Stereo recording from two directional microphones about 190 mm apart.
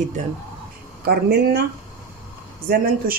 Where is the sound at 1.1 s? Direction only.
55° right (ahead or behind).